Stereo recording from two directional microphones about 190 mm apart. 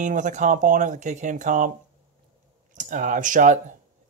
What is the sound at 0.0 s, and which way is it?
Speech, 40° right (ahead or behind).